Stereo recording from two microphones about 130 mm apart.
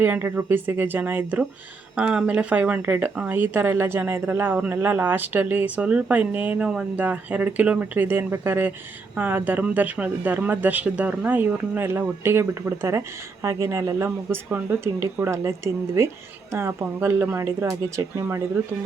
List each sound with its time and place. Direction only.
0.0 s speech: 15° right (ahead or behind)